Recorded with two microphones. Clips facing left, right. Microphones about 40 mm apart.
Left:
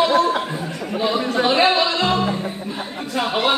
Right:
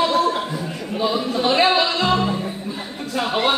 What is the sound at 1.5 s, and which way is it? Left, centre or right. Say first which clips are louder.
Speech: right 1 dB; centre.